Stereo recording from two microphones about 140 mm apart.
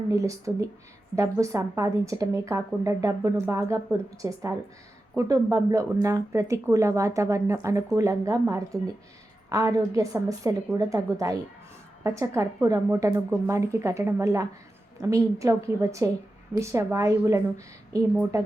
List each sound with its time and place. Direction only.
0.1 s a woman's voice: 25° right (ahead or behind)